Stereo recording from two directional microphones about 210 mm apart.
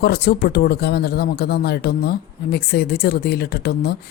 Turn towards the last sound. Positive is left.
turn(degrees=50)  # may be behind; listen again after turning